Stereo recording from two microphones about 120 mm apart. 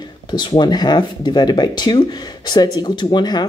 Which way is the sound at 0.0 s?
40° left (ahead or behind).